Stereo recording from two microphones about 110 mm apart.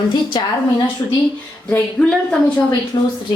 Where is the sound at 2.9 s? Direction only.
40° left (ahead or behind).